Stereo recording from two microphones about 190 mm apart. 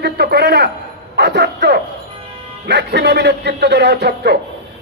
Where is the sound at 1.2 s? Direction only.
60° right (ahead or behind).